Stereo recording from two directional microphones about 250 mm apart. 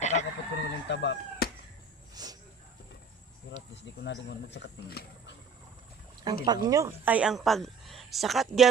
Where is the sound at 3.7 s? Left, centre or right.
Left.